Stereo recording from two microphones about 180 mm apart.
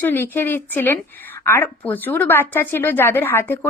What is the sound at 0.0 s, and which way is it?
A woman's voice, 10° left (ahead or behind).